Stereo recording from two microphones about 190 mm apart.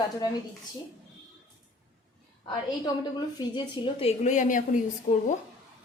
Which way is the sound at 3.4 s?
25° left (ahead or behind).